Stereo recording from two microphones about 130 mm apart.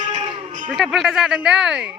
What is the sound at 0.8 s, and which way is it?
Speech, centre (ahead or behind).